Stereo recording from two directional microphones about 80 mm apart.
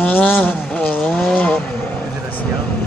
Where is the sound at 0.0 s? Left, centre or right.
Left.